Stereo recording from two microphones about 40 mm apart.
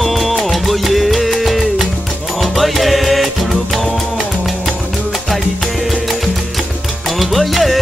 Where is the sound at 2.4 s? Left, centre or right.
Centre.